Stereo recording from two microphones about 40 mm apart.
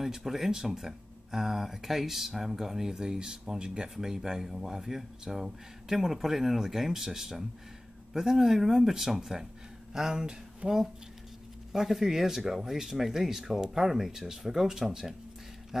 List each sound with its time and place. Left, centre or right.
0.0 s speech: centre
10.6 s speech: right
11.7 s speech: centre
15.7 s dog: centre